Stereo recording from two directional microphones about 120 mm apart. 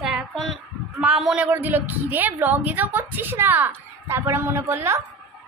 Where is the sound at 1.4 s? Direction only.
15° right (ahead or behind).